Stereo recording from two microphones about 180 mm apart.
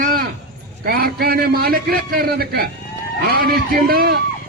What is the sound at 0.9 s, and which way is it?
A man's voice, 55° right (ahead or behind).